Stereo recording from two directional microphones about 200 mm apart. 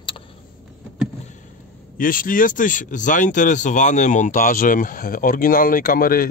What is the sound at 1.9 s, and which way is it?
Speech, 45° left (ahead or behind).